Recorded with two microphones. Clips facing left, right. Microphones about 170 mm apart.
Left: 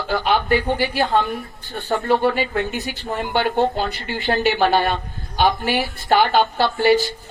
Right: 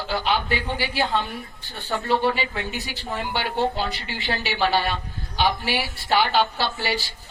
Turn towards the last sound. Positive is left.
turn(degrees=50)  # may be behind; listen again after turning